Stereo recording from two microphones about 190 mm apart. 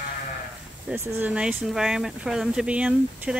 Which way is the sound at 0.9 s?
10° right (ahead or behind).